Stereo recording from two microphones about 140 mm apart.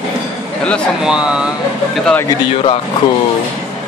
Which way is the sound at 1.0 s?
5° right (ahead or behind).